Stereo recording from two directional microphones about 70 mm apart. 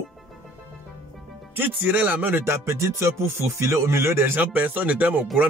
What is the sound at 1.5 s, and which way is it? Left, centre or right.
Music, right.